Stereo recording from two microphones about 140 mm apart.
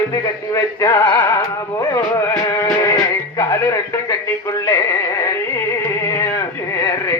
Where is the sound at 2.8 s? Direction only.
20° left (ahead or behind).